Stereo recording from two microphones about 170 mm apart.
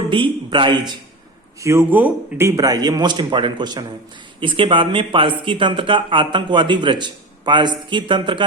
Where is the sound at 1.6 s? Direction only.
15° right (ahead or behind).